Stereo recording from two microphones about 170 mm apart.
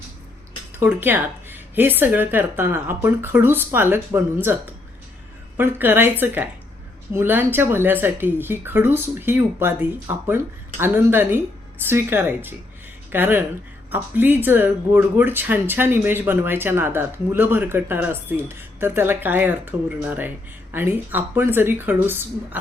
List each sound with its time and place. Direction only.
0.8 s speech: 10° right (ahead or behind)